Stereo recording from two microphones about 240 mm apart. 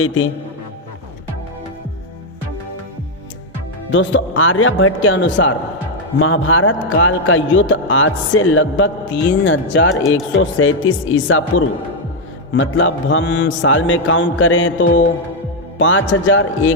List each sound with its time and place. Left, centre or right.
0.0 s speech: left
3.9 s a man's voice: left